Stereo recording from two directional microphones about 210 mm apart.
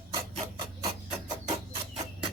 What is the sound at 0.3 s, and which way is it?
Rub, 25° right (ahead or behind).